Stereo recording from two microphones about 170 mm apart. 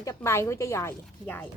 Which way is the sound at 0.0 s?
15° left (ahead or behind).